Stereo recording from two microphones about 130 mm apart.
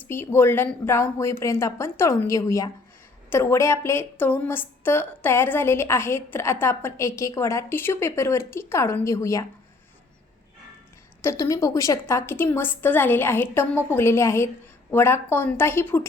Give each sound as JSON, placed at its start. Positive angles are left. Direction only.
{"t": 0.0, "sound": "a woman's voice", "side_deg": 15}
{"t": 11.2, "sound": "a woman's voice", "side_deg": 20}